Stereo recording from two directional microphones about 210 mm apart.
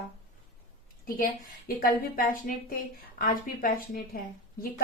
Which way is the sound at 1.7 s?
45° left (ahead or behind).